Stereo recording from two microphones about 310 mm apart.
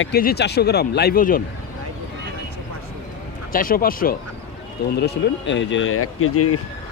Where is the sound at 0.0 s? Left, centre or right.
Left.